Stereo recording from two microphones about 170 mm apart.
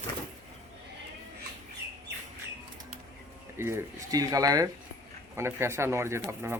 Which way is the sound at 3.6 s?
15° right (ahead or behind).